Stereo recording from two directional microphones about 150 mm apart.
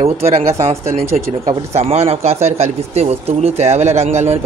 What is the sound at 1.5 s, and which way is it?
Speech, 45° right (ahead or behind).